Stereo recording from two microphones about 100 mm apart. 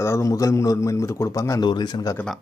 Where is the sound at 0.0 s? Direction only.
30° left (ahead or behind).